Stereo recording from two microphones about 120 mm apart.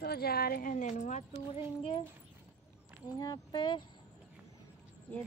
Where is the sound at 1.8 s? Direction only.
50° left (ahead or behind).